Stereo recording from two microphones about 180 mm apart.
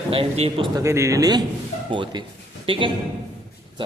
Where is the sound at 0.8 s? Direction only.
15° right (ahead or behind).